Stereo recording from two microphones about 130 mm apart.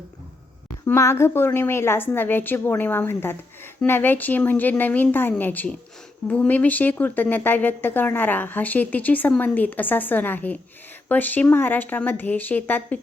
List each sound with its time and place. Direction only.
0.9 s speech: 20° left (ahead or behind)